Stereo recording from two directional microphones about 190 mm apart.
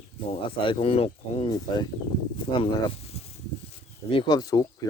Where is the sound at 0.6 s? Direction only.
30° left (ahead or behind).